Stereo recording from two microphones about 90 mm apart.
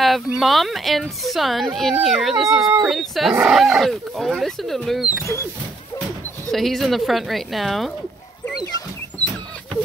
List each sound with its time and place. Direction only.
0.0 s speech: centre (ahead or behind)
5.0 s speech: 35° left (ahead or behind)
6.5 s speech: centre (ahead or behind)